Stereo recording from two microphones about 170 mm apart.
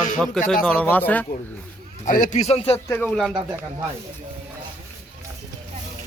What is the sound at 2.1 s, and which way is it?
Speech, 50° left (ahead or behind).